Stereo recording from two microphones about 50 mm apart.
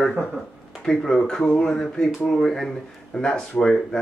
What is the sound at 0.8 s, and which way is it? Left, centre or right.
Speech, centre.